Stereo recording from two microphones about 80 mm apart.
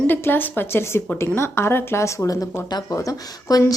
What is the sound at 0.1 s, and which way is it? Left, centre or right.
A woman's voice, left.